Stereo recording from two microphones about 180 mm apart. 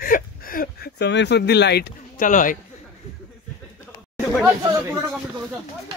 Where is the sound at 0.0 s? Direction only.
50° left (ahead or behind).